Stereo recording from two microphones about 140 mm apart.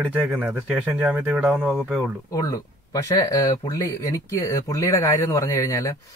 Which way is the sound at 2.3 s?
25° left (ahead or behind).